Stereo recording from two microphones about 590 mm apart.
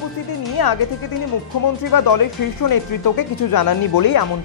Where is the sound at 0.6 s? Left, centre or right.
Left.